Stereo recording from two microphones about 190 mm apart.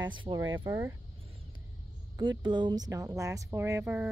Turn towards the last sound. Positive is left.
turn(degrees=-10)  # may be behind; listen again after turning